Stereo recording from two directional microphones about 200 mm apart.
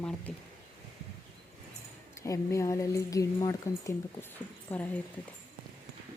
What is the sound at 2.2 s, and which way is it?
Speech, 15° left (ahead or behind).